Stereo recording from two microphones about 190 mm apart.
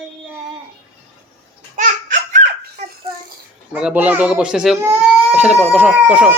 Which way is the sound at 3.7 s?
5° right (ahead or behind).